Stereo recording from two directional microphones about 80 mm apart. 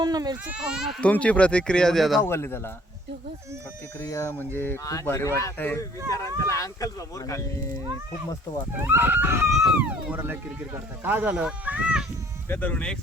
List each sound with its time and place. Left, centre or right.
0.0 s speech: right
0.4 s speech: centre
1.0 s speech: centre
2.2 s speech: left
4.1 s speech: left
4.8 s speech: left
5.0 s speech: left
5.5 s speech: left
6.1 s speech: left
8.7 s a sound: right
9.5 s speech: centre
9.7 s a sound: centre
10.6 s speech: right
12.5 s speech: left